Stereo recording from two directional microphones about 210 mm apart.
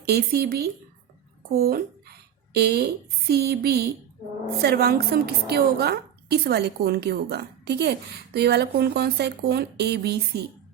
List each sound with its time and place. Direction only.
0.0 s a woman's voice: 50° right (ahead or behind)